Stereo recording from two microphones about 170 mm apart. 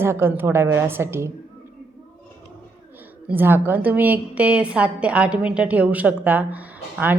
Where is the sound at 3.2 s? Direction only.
10° right (ahead or behind).